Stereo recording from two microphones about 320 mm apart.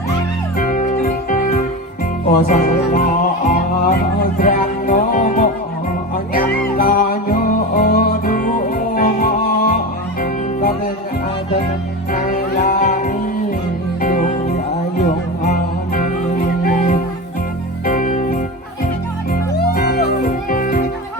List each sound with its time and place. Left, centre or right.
0.5 s music: left
12.1 s music: left
19.7 s music: left